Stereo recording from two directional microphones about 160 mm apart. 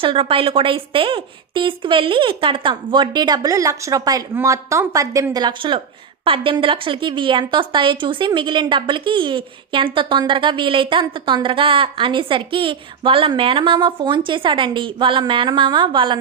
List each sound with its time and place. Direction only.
0.0 s a woman's voice: 35° right (ahead or behind)